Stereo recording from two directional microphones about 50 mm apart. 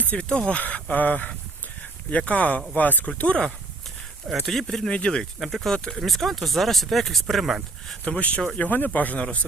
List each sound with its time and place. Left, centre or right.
0.0 s speech: left
4.4 s speech: centre
4.9 s speech: centre
5.4 s speech: centre
6.0 s speech: centre
8.0 s speech: left